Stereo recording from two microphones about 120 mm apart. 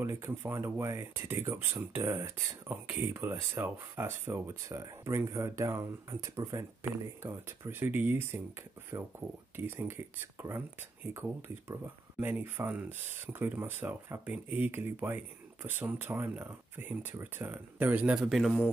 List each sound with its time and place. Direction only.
0.0 s speech: 20° right (ahead or behind)
9.6 s speech: 20° right (ahead or behind); by 18.6 s centre (ahead or behind)